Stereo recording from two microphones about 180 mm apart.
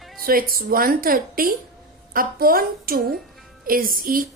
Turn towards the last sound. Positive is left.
turn(degrees=-50)  # may be behind; listen again after turning